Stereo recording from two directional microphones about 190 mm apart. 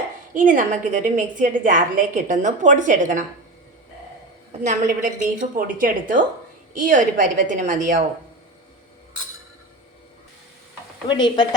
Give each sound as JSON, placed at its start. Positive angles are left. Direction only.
{"t": 0.3, "sound": "a woman's voice", "side_deg": -45}
{"t": 4.6, "sound": "a woman's voice", "side_deg": -40}
{"t": 11.1, "sound": "speech", "side_deg": 25}